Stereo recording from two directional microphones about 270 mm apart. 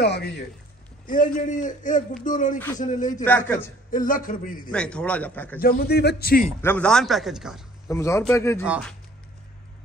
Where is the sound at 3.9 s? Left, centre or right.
Left.